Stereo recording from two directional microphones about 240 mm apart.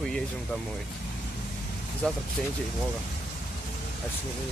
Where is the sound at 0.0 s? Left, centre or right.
Centre.